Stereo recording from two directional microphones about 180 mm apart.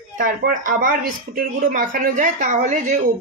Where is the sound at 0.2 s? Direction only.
50° right (ahead or behind).